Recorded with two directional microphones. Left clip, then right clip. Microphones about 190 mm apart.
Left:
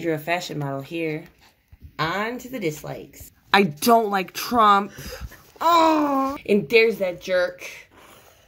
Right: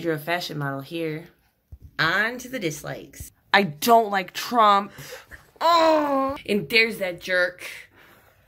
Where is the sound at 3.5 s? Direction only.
15° left (ahead or behind).